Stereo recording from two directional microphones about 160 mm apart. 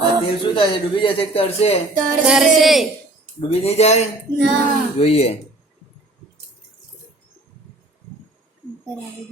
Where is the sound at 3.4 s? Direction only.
40° left (ahead or behind).